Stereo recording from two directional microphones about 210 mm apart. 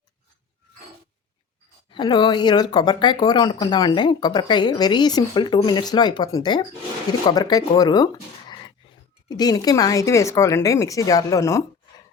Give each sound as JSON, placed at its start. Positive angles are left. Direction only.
{"t": 1.9, "sound": "speech", "side_deg": 20}